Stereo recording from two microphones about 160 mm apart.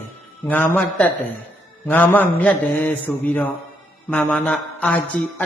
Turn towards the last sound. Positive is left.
turn(degrees=5)  # may be behind; listen again after turning